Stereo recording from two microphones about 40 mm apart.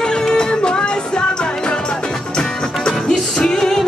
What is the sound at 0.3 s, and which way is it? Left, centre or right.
Music, left.